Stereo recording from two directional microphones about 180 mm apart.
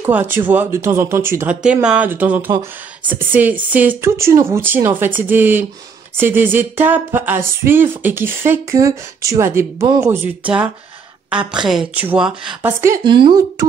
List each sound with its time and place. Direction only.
0.0 s a sound: 10° right (ahead or behind)
11.2 s a woman's voice: 5° right (ahead or behind)
13.0 s speech: 25° right (ahead or behind)